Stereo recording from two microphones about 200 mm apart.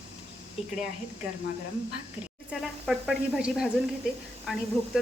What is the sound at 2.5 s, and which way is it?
A woman's voice, centre (ahead or behind).